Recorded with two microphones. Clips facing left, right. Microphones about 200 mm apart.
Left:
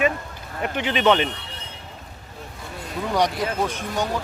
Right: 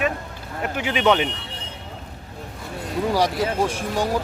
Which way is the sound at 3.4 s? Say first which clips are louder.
Right 3 dB; 30° right (ahead or behind).